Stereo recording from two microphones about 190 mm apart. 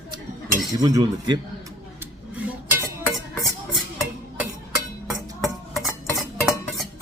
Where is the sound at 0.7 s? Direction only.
20° right (ahead or behind).